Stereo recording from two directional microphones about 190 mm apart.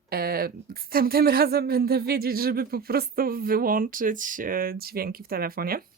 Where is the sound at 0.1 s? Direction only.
50° right (ahead or behind).